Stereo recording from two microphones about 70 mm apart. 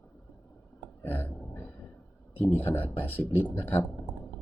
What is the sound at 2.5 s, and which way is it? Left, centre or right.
Speech, left.